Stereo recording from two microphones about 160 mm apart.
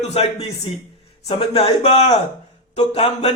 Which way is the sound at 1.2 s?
35° left (ahead or behind).